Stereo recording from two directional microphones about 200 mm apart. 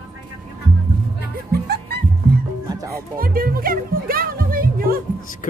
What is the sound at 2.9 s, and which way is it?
Music, 45° right (ahead or behind).